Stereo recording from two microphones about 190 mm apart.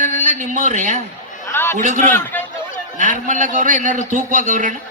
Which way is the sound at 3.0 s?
45° right (ahead or behind).